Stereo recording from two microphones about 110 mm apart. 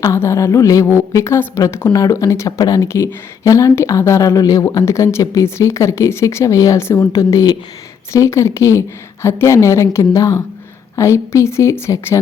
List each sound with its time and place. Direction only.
0.0 s speech: 25° left (ahead or behind)